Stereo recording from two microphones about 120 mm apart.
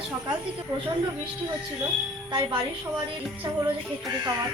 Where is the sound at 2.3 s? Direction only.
40° right (ahead or behind).